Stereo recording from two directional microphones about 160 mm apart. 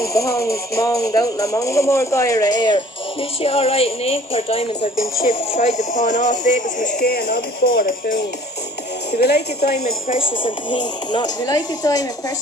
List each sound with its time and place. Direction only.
0.0 s speech: 20° left (ahead or behind)
3.4 s speech: 40° left (ahead or behind); by 8.2 s 65° left (ahead or behind)
9.1 s speech: 80° left; by 10.3 s 55° left (ahead or behind)
10.4 s speech: 30° left (ahead or behind)